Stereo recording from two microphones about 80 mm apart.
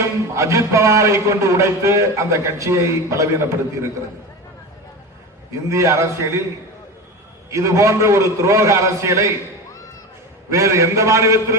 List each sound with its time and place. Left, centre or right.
0.3 s a man's voice: right
5.5 s a man's voice: right
7.5 s a man's voice: right
10.5 s a man's voice: right